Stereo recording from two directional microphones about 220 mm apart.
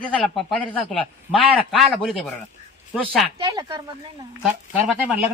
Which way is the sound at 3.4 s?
20° right (ahead or behind).